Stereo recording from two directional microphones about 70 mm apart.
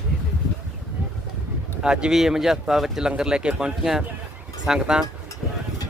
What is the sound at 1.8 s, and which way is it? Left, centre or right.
Speech, centre.